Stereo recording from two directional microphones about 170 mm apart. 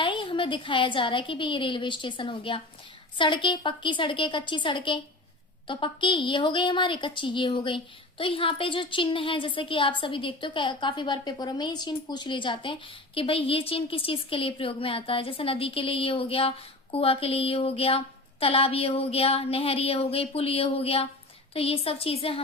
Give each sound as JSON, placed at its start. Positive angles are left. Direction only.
{"t": 0.0, "sound": "a woman's voice", "side_deg": 30}